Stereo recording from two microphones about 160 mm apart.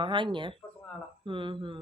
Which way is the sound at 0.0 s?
30° right (ahead or behind).